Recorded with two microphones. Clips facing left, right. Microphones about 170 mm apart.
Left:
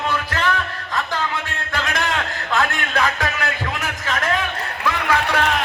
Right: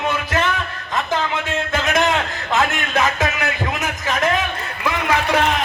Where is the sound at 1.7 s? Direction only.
20° right (ahead or behind).